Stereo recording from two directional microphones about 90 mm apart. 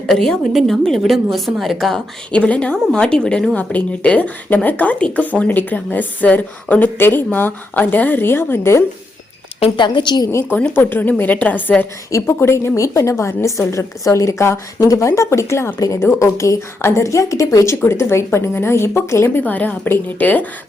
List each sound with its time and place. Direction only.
0.1 s a woman's voice: 5° left (ahead or behind)
2.3 s a woman's voice: 10° left (ahead or behind); by 8.8 s 30° left (ahead or behind)
9.6 s a woman's voice: 75° left (ahead or behind); by 10.2 s 55° left (ahead or behind)
10.3 s a woman's voice: 20° left (ahead or behind)
12.3 s a woman's voice: 30° left (ahead or behind)